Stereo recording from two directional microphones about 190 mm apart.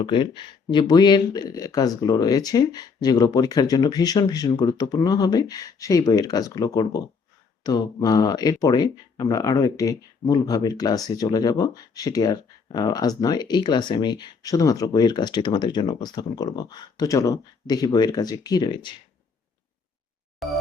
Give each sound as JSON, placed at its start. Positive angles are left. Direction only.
{"t": 0.0, "sound": "speech", "side_deg": 25}
{"t": 20.4, "sound": "music", "side_deg": 0}